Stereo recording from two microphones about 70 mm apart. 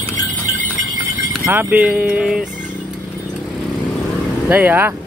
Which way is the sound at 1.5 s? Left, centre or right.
Right.